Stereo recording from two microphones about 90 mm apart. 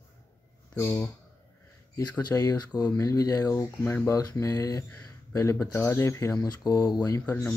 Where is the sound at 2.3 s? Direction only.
40° left (ahead or behind).